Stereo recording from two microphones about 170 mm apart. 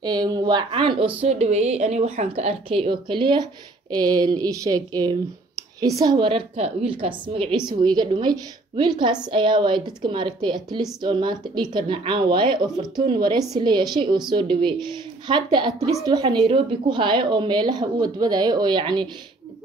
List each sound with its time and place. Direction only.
0.0 s a woman's voice: 25° right (ahead or behind)